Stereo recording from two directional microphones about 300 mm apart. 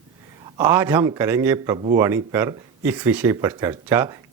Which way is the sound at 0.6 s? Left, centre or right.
Centre.